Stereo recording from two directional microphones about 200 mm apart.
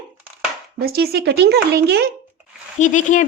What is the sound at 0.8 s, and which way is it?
Speech, 50° right (ahead or behind).